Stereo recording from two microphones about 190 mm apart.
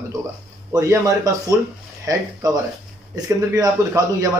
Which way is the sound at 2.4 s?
20° right (ahead or behind).